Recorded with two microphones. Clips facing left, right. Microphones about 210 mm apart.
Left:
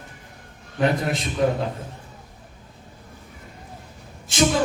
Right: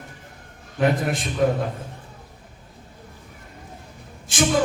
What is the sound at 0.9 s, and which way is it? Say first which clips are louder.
Speech: right 1 dB; 50° right (ahead or behind).